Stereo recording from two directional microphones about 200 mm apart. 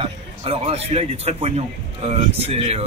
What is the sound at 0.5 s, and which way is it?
Speech, 30° right (ahead or behind).